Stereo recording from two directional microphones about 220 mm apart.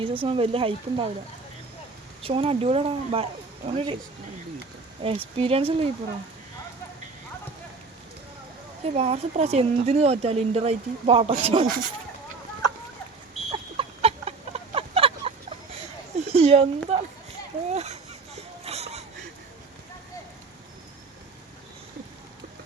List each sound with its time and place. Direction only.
0.0 s a woman's voice: 25° right (ahead or behind)
2.2 s a woman's voice: 25° right (ahead or behind)
5.0 s a woman's voice: 25° right (ahead or behind)
8.8 s a woman's voice: 30° right (ahead or behind)
13.5 s chicken: 25° right (ahead or behind)
16.1 s a sound: 30° right (ahead or behind)